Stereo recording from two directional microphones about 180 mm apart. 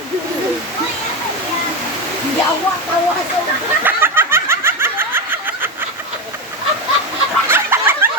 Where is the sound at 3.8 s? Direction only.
10° right (ahead or behind).